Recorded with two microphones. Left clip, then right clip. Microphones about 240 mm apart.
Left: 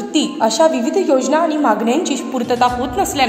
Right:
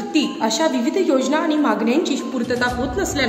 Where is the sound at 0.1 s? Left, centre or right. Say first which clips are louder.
Left 4 dB; centre.